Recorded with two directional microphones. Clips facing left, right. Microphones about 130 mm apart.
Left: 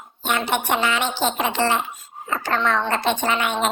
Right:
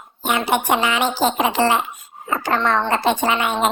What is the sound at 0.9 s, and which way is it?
Speech, 45° right (ahead or behind).